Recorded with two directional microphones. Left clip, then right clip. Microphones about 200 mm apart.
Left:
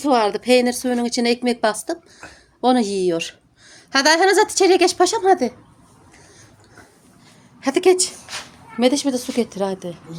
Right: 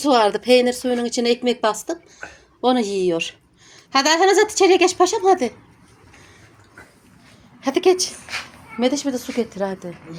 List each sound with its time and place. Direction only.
0.0 s speech: centre (ahead or behind)
7.6 s a woman's voice: 5° left (ahead or behind)
8.8 s speech: 15° left (ahead or behind)